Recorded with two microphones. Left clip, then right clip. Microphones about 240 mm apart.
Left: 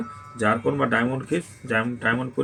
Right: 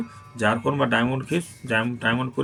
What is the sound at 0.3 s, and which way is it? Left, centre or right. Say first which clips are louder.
Speech: even; right.